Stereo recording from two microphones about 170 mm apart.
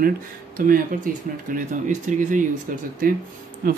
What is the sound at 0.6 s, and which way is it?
Speech, 55° right (ahead or behind).